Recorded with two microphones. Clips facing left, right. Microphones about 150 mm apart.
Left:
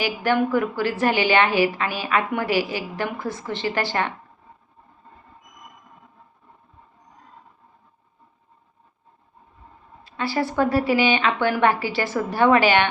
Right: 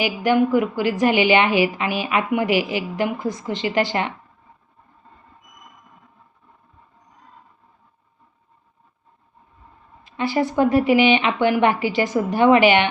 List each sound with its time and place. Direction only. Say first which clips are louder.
0.0 s a woman's voice: right 3 dB; 15° right (ahead or behind)
10.0 s a woman's voice: right 3 dB; 15° right (ahead or behind)